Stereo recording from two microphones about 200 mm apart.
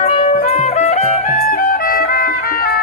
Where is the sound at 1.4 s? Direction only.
50° left (ahead or behind).